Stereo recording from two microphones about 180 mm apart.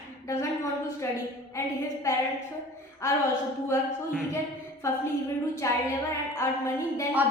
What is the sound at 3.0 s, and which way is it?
A woman's voice, 15° left (ahead or behind).